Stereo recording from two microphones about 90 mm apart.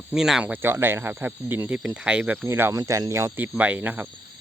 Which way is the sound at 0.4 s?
25° right (ahead or behind).